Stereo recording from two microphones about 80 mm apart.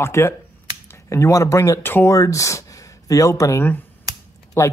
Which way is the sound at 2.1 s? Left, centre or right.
Left.